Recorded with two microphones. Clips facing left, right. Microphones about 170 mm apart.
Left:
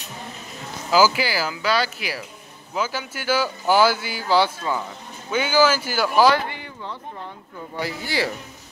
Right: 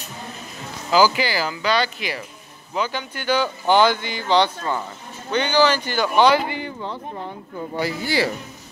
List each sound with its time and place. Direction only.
0.9 s speech: 5° left (ahead or behind)
6.6 s a sound: 30° right (ahead or behind)
7.8 s speech: 35° right (ahead or behind)